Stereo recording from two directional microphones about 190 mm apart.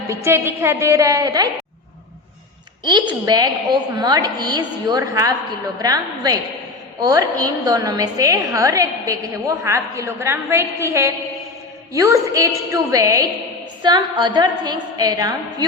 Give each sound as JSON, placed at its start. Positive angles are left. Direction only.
{"t": 0.1, "sound": "a woman's voice", "side_deg": -15}
{"t": 2.8, "sound": "a woman's voice", "side_deg": -25}